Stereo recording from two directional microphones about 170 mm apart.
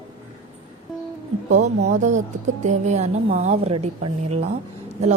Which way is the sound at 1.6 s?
45° right (ahead or behind).